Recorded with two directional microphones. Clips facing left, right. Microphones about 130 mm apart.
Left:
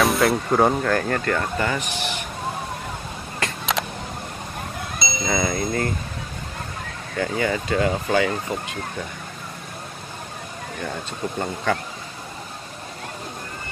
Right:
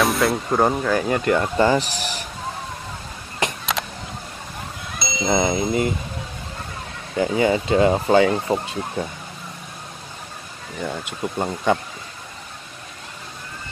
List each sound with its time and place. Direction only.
0.0 s speech: centre (ahead or behind); by 1.5 s 15° right (ahead or behind)
1.6 s speech: 30° right (ahead or behind)
3.4 s a sound: 20° right (ahead or behind)
3.8 s a sound: centre (ahead or behind)
5.2 s speech: 25° right (ahead or behind)
7.2 s speech: 20° right (ahead or behind)
10.8 s speech: 15° right (ahead or behind)